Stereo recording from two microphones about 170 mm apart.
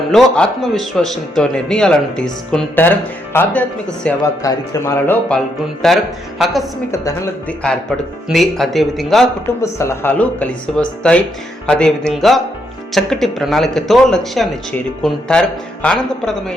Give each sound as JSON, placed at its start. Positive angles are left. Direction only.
{"t": 0.1, "sound": "a man's voice", "side_deg": 5}
{"t": 4.4, "sound": "speech", "side_deg": 20}
{"t": 5.8, "sound": "a man's voice", "side_deg": 0}
{"t": 9.7, "sound": "a man's voice", "side_deg": 15}